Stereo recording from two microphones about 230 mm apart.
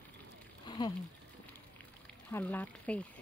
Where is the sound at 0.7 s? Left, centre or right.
Centre.